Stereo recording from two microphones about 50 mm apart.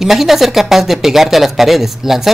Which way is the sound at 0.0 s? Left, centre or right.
Centre.